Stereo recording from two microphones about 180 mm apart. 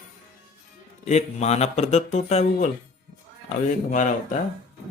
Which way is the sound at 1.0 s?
40° left (ahead or behind).